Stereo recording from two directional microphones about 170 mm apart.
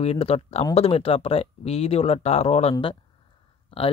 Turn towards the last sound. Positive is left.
turn(degrees=30)  # may be behind; listen again after turning